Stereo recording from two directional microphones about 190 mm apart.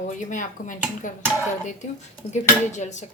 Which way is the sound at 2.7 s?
40° left (ahead or behind).